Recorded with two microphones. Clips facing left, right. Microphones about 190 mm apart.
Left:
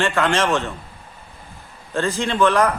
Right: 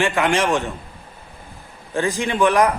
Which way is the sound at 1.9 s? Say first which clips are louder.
Even; 15° right (ahead or behind).